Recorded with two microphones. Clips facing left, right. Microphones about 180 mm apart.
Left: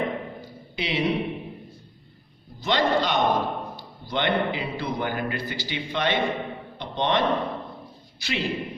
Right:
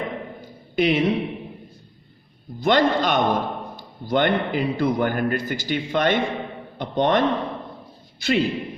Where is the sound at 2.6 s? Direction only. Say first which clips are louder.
Right 4 dB; 50° right (ahead or behind).